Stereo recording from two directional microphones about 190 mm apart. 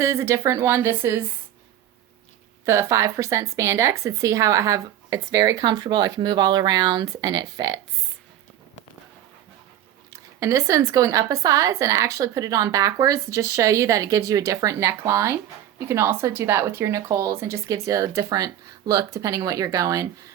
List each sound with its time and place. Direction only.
0.0 s speech: 15° right (ahead or behind)
2.6 s speech: 15° right (ahead or behind)
10.1 s speech: 15° right (ahead or behind)